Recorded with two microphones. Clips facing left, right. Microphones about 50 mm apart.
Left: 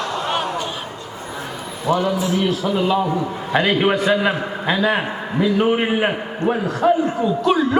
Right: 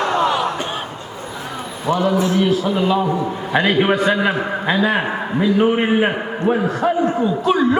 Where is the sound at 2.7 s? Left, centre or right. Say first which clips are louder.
Right 1 dB; centre.